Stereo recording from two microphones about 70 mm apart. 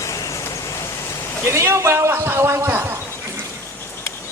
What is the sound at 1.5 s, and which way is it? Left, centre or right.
A man's voice, right.